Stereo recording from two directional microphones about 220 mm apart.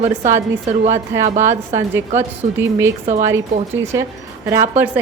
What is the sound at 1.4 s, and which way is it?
A woman's voice, 10° right (ahead or behind).